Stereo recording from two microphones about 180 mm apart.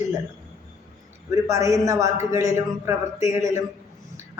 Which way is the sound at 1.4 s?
15° right (ahead or behind).